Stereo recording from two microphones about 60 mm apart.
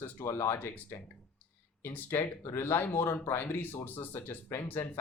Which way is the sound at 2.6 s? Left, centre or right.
Left.